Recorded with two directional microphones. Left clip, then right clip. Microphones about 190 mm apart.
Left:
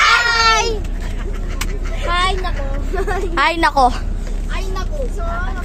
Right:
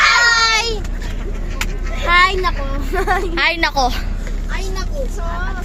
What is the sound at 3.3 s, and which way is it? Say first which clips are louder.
Speech: left 5 dB; 20° left (ahead or behind).